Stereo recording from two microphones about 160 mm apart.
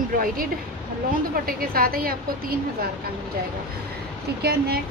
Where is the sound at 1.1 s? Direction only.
65° right (ahead or behind).